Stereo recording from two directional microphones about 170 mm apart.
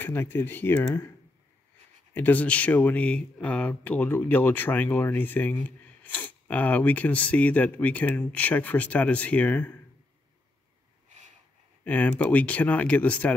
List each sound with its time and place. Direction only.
0.0 s speech: 15° left (ahead or behind)
2.1 s speech: 10° left (ahead or behind)
11.1 s a sound: 45° right (ahead or behind)
11.8 s speech: 10° left (ahead or behind)